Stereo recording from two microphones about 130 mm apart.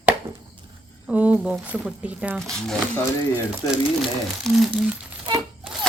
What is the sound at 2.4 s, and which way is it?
Speech, 5° left (ahead or behind).